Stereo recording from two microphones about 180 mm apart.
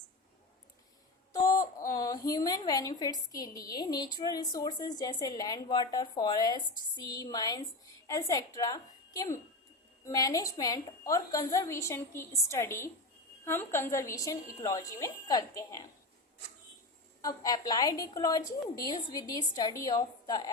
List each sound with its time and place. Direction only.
1.3 s a sound: 20° left (ahead or behind)
3.7 s a woman's voice: 20° left (ahead or behind)
17.2 s a woman's voice: 20° left (ahead or behind)